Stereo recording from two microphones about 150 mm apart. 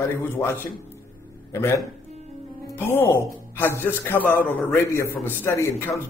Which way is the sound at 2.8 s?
15° left (ahead or behind).